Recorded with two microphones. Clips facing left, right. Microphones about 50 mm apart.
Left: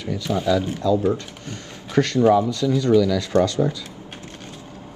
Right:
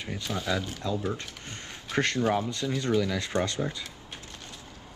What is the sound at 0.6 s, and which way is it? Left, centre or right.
Speech, left.